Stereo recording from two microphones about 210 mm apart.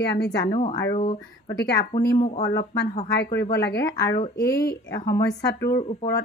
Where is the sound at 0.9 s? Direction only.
40° left (ahead or behind).